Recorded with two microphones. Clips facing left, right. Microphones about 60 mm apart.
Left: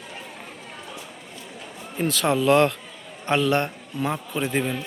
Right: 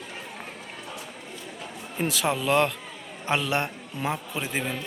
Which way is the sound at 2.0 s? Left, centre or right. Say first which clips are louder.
Left 3 dB; centre.